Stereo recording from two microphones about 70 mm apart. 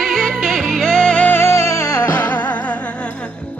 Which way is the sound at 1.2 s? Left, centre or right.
Left.